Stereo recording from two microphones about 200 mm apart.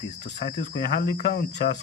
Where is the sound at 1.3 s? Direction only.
50° left (ahead or behind).